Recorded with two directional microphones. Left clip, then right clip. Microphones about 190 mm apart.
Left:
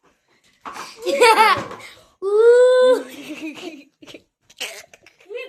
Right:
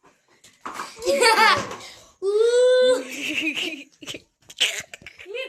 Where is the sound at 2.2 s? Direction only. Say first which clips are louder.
Left 6 dB; 50° left (ahead or behind).